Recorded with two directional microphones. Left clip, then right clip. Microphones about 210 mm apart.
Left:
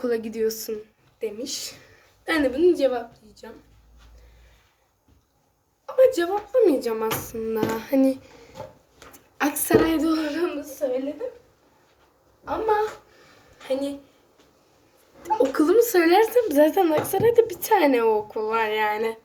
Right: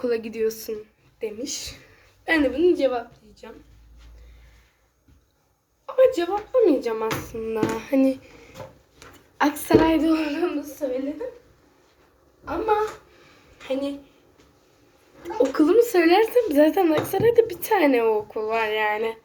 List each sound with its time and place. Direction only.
0.0 s a woman's voice: 10° left (ahead or behind)
6.0 s speech: 20° left (ahead or behind); by 8.3 s 5° left (ahead or behind)
9.4 s speech: 20° left (ahead or behind)
10.2 s speech: 10° left (ahead or behind)
15.2 s speech: 15° left (ahead or behind)